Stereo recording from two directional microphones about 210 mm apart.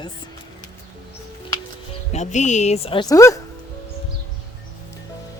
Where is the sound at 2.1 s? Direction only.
35° left (ahead or behind); by 3.4 s 15° left (ahead or behind).